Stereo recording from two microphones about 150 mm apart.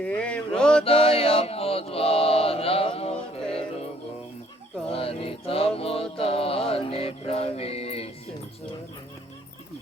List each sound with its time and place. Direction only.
0.0 s mantra: 10° left (ahead or behind)
0.9 s mantra: 40° left (ahead or behind)
4.9 s mantra: 40° left (ahead or behind)
5.7 s music: 40° left (ahead or behind)